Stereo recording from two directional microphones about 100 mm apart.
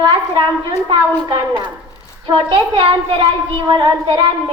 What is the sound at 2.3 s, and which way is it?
A child's voice, 55° right (ahead or behind).